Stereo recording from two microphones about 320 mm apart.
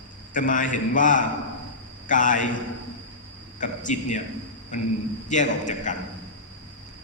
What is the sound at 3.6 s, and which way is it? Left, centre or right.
A man's voice, left.